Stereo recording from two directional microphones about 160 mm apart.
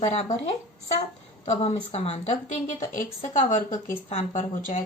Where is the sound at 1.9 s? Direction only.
40° left (ahead or behind).